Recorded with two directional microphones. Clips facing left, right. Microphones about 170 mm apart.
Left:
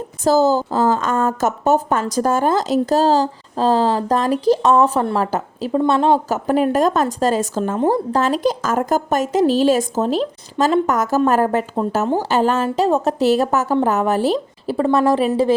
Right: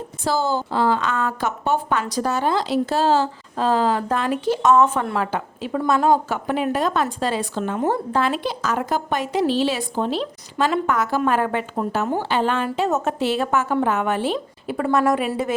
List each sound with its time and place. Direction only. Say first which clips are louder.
0.3 s a woman's voice: left 7 dB; 40° left (ahead or behind)
6.3 s a woman's voice: left 6 dB; 40° left (ahead or behind)